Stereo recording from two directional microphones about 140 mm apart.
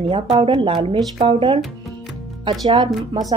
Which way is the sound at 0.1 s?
40° right (ahead or behind).